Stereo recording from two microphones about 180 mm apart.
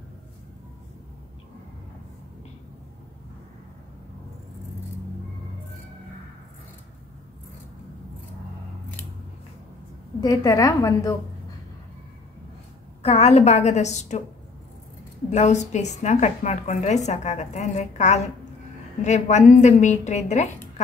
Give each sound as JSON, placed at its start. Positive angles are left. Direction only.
{"t": 10.2, "sound": "a woman's voice", "side_deg": 20}
{"t": 13.0, "sound": "a woman's voice", "side_deg": 35}
{"t": 15.2, "sound": "a woman's voice", "side_deg": 40}